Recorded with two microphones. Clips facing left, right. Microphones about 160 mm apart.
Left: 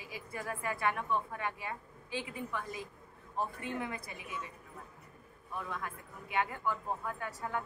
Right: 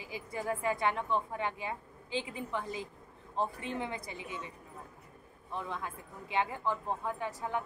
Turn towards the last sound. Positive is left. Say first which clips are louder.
# right 2 dB
turn(degrees=-20)  # may be behind; listen again after turning